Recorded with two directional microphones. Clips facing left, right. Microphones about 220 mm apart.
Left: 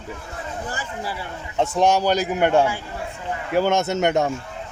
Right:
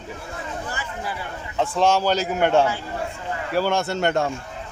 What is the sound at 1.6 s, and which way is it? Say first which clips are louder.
Speech: left 1 dB; 15° left (ahead or behind).